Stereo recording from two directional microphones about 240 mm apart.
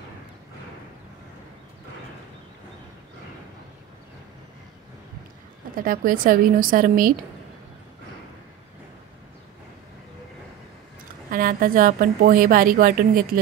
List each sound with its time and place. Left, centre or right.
5.8 s a woman's voice: right
11.2 s a woman's voice: right